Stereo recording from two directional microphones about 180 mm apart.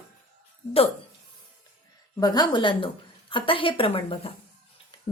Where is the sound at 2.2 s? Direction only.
20° left (ahead or behind).